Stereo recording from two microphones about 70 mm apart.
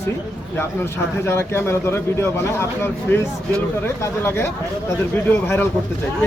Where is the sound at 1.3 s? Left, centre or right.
Left.